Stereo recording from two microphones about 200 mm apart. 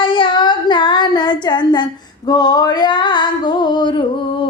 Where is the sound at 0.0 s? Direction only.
25° left (ahead or behind).